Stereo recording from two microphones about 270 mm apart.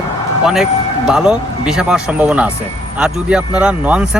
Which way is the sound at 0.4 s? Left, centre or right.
Centre.